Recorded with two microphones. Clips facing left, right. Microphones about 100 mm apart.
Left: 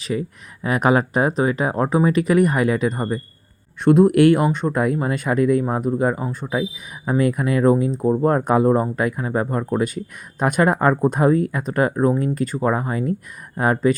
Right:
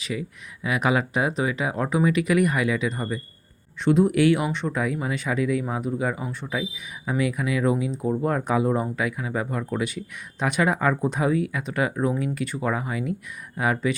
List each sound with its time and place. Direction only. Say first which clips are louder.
0.0 s speech: left 6 dB; 40° left (ahead or behind)